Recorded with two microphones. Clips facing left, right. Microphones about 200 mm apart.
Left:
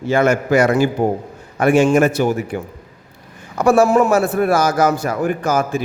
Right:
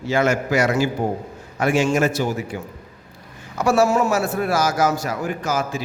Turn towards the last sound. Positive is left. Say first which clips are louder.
# left 5 dB
turn(degrees=55)  # may be behind; listen again after turning